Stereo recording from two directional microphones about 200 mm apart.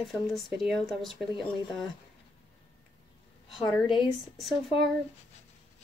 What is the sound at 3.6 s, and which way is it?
Speech, 20° left (ahead or behind).